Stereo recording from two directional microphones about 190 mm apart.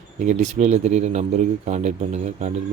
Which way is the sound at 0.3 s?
40° right (ahead or behind).